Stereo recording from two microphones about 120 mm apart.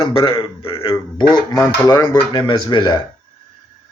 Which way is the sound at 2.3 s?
40° left (ahead or behind).